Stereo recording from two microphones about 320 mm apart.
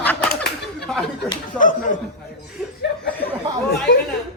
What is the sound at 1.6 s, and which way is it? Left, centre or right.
Speech, left.